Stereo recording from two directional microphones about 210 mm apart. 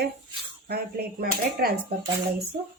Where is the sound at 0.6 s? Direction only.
45° right (ahead or behind).